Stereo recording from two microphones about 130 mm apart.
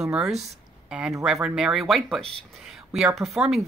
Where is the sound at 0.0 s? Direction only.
Centre (ahead or behind).